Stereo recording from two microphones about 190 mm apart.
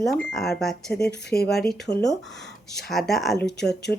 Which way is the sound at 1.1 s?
60° left (ahead or behind).